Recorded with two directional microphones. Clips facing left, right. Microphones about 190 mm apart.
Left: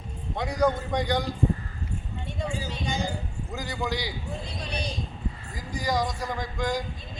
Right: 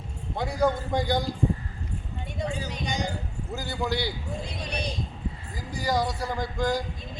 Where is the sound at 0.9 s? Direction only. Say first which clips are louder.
Right 1 dB; 5° right (ahead or behind).